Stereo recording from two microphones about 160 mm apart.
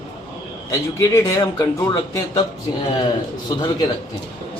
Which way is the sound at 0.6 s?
20° left (ahead or behind).